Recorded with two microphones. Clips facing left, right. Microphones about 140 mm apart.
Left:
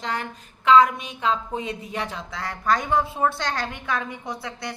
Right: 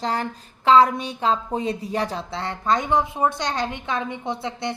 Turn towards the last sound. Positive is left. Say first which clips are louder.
# right 5 dB
turn(degrees=-25)  # may be behind; listen again after turning